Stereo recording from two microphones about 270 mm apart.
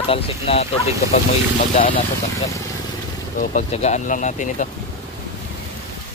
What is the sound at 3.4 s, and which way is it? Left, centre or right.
Speech, left.